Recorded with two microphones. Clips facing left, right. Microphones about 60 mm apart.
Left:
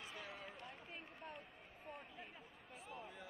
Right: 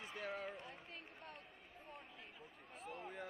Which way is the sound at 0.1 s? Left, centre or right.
Right.